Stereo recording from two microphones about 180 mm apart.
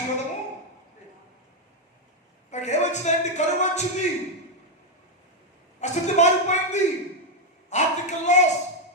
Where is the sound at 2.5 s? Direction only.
40° left (ahead or behind).